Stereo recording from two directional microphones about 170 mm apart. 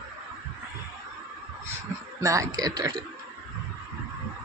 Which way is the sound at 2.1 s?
20° right (ahead or behind).